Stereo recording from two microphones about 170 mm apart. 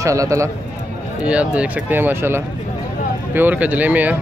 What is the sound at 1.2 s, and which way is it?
Speech, 5° right (ahead or behind).